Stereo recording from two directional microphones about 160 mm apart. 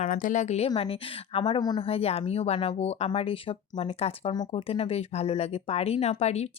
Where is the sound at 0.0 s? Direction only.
55° left (ahead or behind); by 1.9 s 25° left (ahead or behind).